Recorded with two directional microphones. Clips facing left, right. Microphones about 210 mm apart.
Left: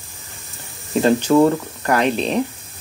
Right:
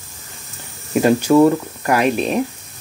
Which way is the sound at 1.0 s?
10° right (ahead or behind).